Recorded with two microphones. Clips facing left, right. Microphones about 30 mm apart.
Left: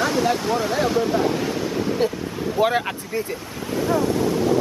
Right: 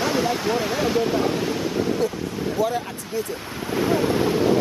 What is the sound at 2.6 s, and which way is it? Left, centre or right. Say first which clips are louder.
Speech: left 4 dB; left.